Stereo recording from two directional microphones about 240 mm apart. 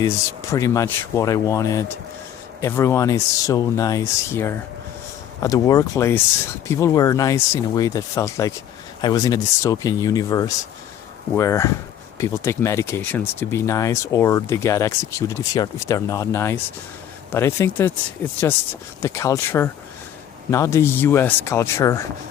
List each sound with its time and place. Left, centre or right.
0.5 s speech: centre
19.0 s speech: centre